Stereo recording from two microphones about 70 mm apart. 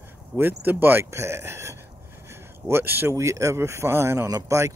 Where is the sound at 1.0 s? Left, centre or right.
Right.